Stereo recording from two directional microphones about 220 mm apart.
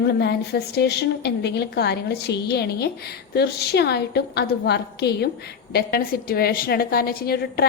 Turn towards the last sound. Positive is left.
turn(degrees=45)  # may be behind; listen again after turning